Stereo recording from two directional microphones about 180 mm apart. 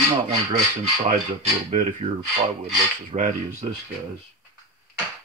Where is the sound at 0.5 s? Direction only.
40° right (ahead or behind).